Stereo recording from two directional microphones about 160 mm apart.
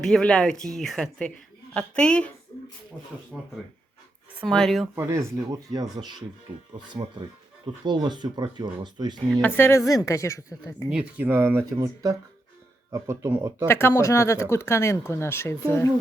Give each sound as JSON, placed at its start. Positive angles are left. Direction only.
{"t": 0.0, "sound": "speech", "side_deg": 5}
{"t": 3.3, "sound": "speech", "side_deg": 0}
{"t": 4.9, "sound": "speech", "side_deg": -15}
{"t": 7.9, "sound": "speech", "side_deg": -25}
{"t": 9.3, "sound": "speech", "side_deg": 10}
{"t": 10.8, "sound": "speech", "side_deg": -5}
{"t": 13.7, "sound": "speech", "side_deg": 15}